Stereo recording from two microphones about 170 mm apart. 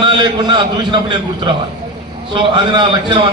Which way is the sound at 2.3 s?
30° right (ahead or behind).